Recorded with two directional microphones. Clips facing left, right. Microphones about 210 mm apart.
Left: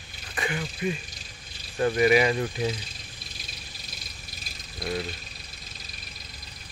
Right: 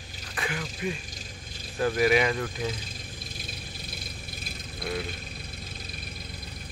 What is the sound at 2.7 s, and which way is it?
Vehicle, 50° right (ahead or behind).